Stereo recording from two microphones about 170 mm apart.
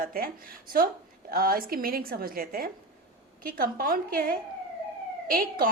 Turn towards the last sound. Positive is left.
turn(degrees=-55)  # may be behind; listen again after turning